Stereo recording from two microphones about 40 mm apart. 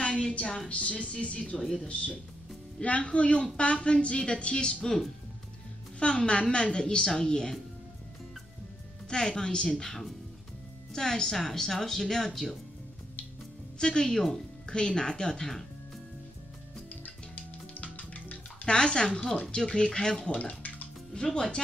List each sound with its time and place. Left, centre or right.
0.0 s a woman's voice: left
1.6 s a woman's voice: centre
2.8 s a woman's voice: left
4.8 s a woman's voice: centre
5.9 s a woman's voice: left
9.1 s a woman's voice: centre
13.7 s a woman's voice: centre
16.9 s music: left
18.7 s a woman's voice: left